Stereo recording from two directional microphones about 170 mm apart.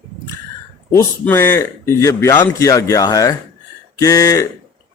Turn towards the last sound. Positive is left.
turn(degrees=20)  # may be behind; listen again after turning